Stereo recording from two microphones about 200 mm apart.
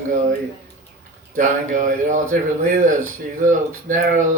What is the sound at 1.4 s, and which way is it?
Speech, 40° right (ahead or behind).